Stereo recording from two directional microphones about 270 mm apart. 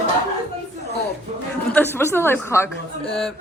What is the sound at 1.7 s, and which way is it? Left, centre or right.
A woman's voice, centre.